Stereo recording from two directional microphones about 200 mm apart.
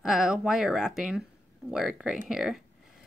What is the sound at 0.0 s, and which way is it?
A woman's voice, 5° right (ahead or behind).